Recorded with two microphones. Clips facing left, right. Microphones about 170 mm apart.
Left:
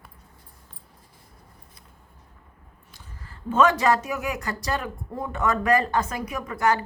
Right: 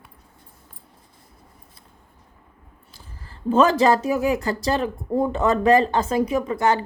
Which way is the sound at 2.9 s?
30° right (ahead or behind).